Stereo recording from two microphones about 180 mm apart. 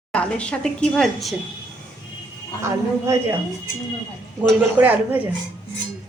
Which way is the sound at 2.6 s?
15° right (ahead or behind).